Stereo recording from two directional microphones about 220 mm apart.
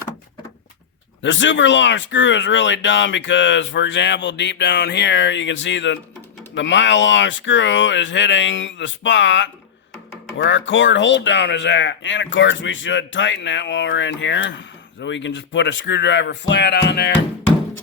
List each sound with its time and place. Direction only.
1.2 s speech: 55° left (ahead or behind)